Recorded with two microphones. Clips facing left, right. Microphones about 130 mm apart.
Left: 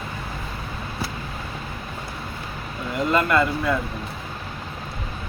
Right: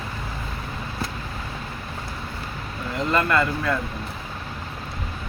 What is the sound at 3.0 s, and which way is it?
Speech, 15° left (ahead or behind).